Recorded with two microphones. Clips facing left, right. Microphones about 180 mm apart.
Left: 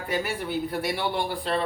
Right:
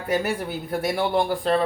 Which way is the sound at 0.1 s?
45° right (ahead or behind).